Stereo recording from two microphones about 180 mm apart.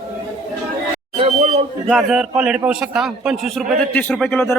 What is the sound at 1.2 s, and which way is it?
Speech, 40° right (ahead or behind).